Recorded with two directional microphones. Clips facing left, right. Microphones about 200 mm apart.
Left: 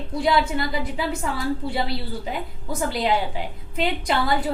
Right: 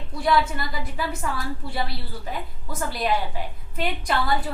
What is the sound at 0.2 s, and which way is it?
A woman's voice, 20° left (ahead or behind).